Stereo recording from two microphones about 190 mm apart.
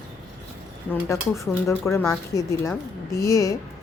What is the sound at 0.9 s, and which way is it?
Speech, 15° left (ahead or behind).